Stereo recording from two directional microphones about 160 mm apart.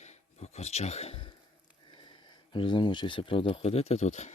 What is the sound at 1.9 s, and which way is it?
Speech, 30° left (ahead or behind).